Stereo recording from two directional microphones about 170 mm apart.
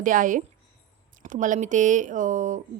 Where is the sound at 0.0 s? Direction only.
50° right (ahead or behind).